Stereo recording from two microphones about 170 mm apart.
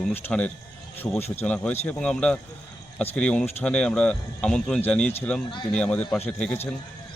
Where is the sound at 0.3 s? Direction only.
5° left (ahead or behind).